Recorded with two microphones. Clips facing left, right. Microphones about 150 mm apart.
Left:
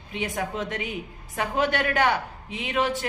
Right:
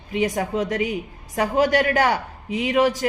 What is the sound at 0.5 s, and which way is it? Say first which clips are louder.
A woman's voice: right 7 dB; 40° right (ahead or behind).